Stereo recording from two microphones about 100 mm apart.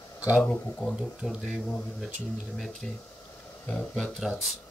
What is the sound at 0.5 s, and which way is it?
Speech, 10° left (ahead or behind).